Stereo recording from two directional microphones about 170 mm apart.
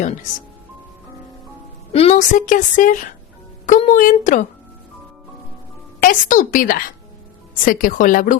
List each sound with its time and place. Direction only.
1.9 s a woman's voice: 35° left (ahead or behind)
2.5 s a woman's voice: 50° left (ahead or behind)
6.0 s a woman's voice: 50° left (ahead or behind)